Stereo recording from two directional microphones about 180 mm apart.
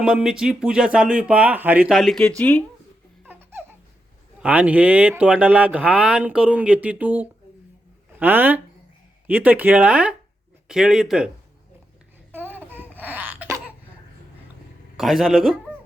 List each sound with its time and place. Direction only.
0.0 s speech: 5° right (ahead or behind)
3.2 s laughter: 10° right (ahead or behind)
4.4 s speech: 5° right (ahead or behind)
12.3 s a sound: 10° right (ahead or behind)
14.9 s speech: centre (ahead or behind)